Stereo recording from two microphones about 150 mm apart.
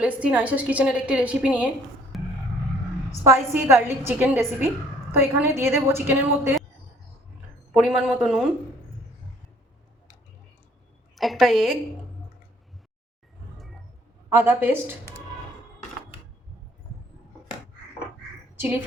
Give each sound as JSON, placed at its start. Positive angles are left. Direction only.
{"t": 0.0, "sound": "a woman's voice", "side_deg": -10}
{"t": 2.1, "sound": "a sound", "side_deg": 0}
{"t": 3.1, "sound": "a woman's voice", "side_deg": -20}
{"t": 7.7, "sound": "speech", "side_deg": -5}
{"t": 11.1, "sound": "a woman's voice", "side_deg": 0}
{"t": 14.3, "sound": "a woman's voice", "side_deg": -15}
{"t": 18.5, "sound": "a sound", "side_deg": -15}